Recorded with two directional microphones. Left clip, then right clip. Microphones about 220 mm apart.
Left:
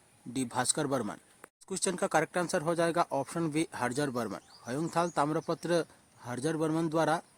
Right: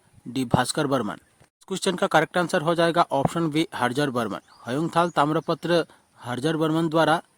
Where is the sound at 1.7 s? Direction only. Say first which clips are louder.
Right 8 dB; 80° right.